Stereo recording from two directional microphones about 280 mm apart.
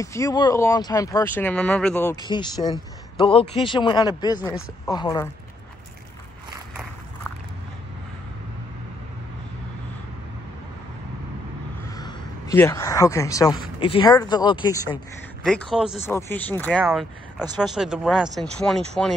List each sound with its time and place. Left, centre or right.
0.0 s speech: centre
11.9 s a sound: centre
13.7 s speech: centre
15.4 s speech: centre